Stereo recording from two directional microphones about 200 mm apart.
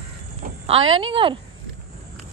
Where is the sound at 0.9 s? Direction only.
25° right (ahead or behind).